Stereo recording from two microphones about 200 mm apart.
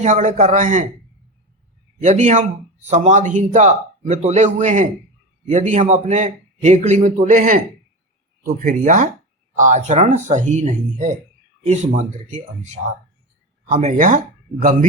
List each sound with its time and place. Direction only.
0.0 s a man's voice: 35° right (ahead or behind)
2.0 s a man's voice: 35° right (ahead or behind)
13.7 s a man's voice: 35° right (ahead or behind)